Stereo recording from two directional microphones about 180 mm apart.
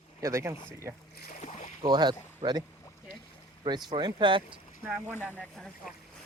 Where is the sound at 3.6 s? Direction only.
25° right (ahead or behind).